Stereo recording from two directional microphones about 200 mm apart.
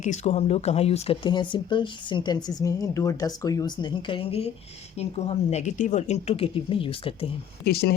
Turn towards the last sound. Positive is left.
turn(degrees=55)  # may be behind; listen again after turning